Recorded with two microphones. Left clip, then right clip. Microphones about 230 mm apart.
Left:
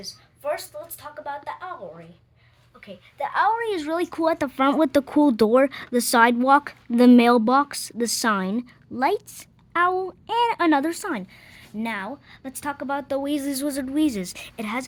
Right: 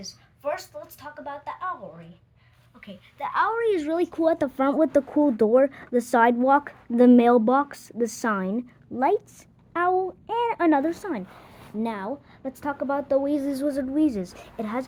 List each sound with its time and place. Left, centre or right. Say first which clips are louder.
0.0 s a sound: left 1 dB; centre
1.2 s speech: even; centre
2.8 s speech: left 3 dB; left